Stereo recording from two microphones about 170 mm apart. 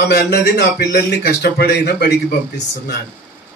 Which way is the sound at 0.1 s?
75° left (ahead or behind).